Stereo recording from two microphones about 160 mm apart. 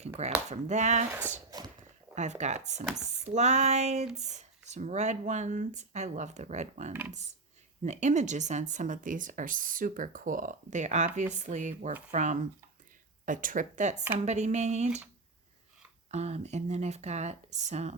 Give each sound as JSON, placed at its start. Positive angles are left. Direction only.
{"t": 0.2, "sound": "speech", "side_deg": -45}
{"t": 1.5, "sound": "a sound", "side_deg": -25}
{"t": 2.1, "sound": "speech", "side_deg": -45}
{"t": 16.1, "sound": "speech", "side_deg": -45}